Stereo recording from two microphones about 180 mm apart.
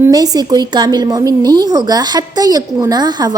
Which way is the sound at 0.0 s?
20° right (ahead or behind).